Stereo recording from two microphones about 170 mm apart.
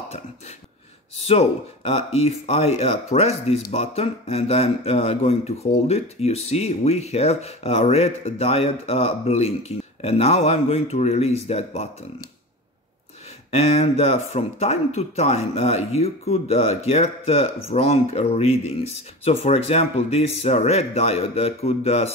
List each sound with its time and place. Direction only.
1.1 s speech: 35° left (ahead or behind)
13.5 s speech: 35° left (ahead or behind)